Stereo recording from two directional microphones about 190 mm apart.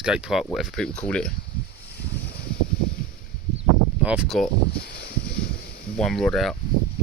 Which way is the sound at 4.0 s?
5° right (ahead or behind).